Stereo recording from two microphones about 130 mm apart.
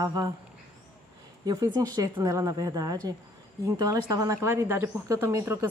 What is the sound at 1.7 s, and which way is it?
Speech, 30° right (ahead or behind).